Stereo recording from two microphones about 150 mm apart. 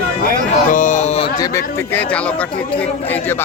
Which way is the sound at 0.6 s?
60° left (ahead or behind).